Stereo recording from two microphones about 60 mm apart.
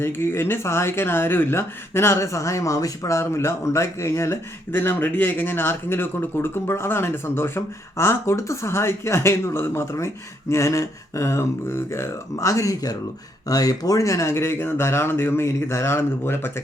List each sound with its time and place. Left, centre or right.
0.0 s speech: left
3.2 s speech: left
4.7 s speech: left